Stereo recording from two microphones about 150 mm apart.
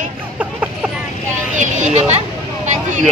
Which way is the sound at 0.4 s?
10° right (ahead or behind).